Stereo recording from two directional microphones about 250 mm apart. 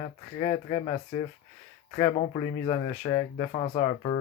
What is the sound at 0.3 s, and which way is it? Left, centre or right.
Speech, left.